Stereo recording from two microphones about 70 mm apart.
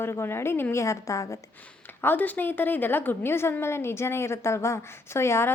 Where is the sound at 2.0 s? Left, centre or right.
Left.